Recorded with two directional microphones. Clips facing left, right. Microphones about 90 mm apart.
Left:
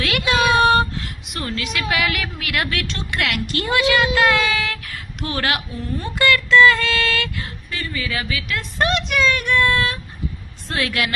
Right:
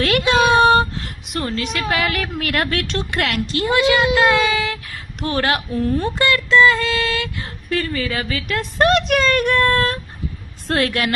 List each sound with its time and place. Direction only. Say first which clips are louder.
0.0 s child singing: right 3 dB; 40° right (ahead or behind); by 1.0 s 25° right (ahead or behind)
1.3 s a woman's voice: right 4 dB; 35° right (ahead or behind)
3.4 s speech: right 3 dB; 25° right (ahead or behind)
5.2 s a woman's voice: right 3 dB; 35° right (ahead or behind)
7.7 s speech: right 8 dB; 55° right (ahead or behind)
8.0 s a woman's voice: right 2 dB; 40° right (ahead or behind)